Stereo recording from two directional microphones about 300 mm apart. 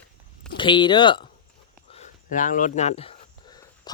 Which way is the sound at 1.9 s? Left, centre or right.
Left.